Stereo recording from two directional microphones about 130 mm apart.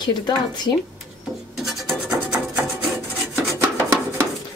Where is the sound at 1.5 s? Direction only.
Centre (ahead or behind).